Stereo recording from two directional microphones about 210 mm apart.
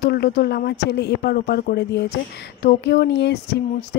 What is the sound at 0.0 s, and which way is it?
Speech, 55° left (ahead or behind).